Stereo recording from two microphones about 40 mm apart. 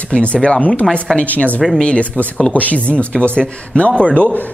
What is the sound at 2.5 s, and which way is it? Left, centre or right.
A man's voice, left.